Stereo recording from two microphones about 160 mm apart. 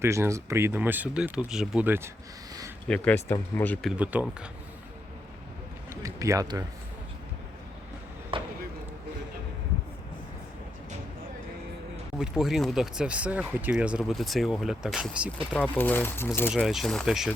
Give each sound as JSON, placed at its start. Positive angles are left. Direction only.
{"t": 0.0, "sound": "speech", "side_deg": -15}
{"t": 2.8, "sound": "speech", "side_deg": 5}
{"t": 3.8, "sound": "speech", "side_deg": -10}
{"t": 5.9, "sound": "speech", "side_deg": -20}
{"t": 8.3, "sound": "basketball bounce", "side_deg": -35}
{"t": 12.2, "sound": "speech", "side_deg": 0}
{"t": 15.5, "sound": "speech", "side_deg": 10}
{"t": 16.5, "sound": "speech", "side_deg": 0}